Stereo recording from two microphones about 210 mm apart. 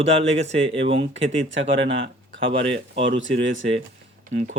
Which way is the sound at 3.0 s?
60° right (ahead or behind).